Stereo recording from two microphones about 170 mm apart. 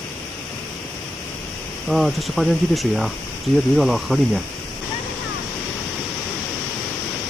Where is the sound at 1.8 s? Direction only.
Centre (ahead or behind).